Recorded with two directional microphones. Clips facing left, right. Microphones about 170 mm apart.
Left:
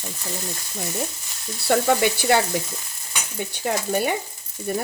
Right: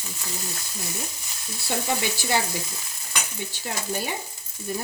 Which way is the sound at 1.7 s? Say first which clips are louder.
Left 8 dB; 60° left (ahead or behind).